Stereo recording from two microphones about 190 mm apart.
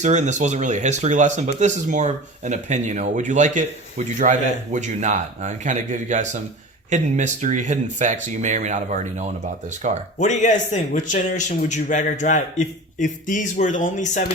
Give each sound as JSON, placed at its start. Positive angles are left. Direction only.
{"t": 0.0, "sound": "speech", "side_deg": -40}
{"t": 10.2, "sound": "a man's voice", "side_deg": 40}